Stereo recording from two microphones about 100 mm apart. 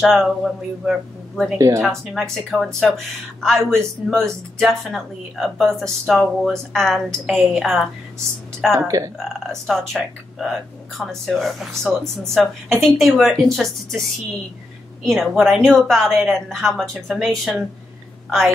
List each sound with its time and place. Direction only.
0.0 s a woman's voice: centre (ahead or behind)
8.7 s speech: 35° right (ahead or behind)
9.2 s a woman's voice: centre (ahead or behind)
15.0 s a woman's voice: centre (ahead or behind)